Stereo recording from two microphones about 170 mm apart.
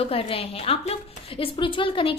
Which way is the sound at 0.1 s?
35° left (ahead or behind).